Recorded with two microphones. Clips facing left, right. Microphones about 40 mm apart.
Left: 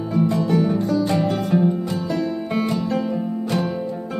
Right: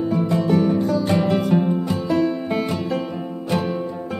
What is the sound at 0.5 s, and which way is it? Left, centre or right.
Music, centre.